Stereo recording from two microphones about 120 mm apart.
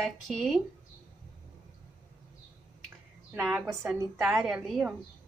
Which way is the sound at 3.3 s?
10° right (ahead or behind).